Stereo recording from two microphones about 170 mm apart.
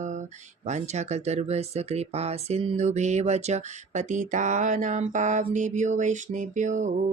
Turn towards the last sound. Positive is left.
turn(degrees=-45)  # may be behind; listen again after turning